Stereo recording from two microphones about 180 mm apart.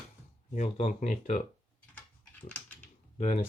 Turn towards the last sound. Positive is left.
turn(degrees=40)  # may be behind; listen again after turning